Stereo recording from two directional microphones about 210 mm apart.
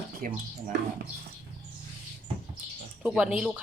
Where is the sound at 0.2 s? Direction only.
40° right (ahead or behind).